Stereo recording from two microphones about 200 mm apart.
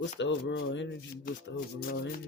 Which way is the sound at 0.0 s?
60° left (ahead or behind).